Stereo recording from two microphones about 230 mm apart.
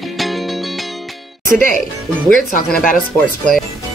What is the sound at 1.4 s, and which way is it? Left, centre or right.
Speech, right.